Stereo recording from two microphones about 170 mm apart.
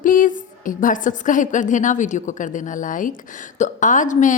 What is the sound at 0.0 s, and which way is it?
A woman's voice, 50° left (ahead or behind).